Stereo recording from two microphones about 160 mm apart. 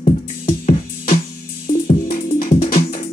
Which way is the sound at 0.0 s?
50° left (ahead or behind).